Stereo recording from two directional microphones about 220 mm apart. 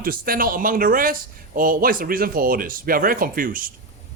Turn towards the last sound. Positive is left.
turn(degrees=-40)  # may be behind; listen again after turning